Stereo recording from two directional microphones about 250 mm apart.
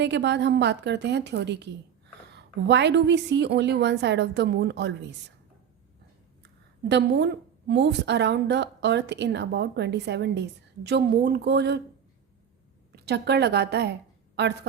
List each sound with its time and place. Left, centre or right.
0.0 s a woman's voice: right
6.4 s a sound: right
7.7 s a woman's voice: right
13.1 s a woman's voice: right